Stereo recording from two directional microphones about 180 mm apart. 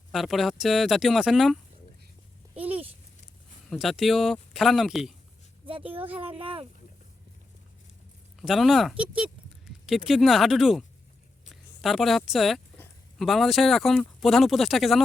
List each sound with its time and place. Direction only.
0.1 s speech: centre (ahead or behind)
2.6 s a sound: 10° right (ahead or behind)
3.7 s speech: centre (ahead or behind)
5.6 s speech: 30° right (ahead or behind)
8.4 s speech: centre (ahead or behind)
12.7 s a sound: 10° left (ahead or behind)
13.2 s speech: centre (ahead or behind)